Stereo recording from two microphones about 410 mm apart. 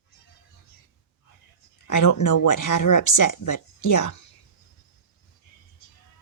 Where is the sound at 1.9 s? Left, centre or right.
Left.